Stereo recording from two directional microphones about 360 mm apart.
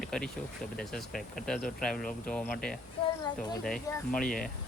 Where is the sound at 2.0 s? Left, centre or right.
Left.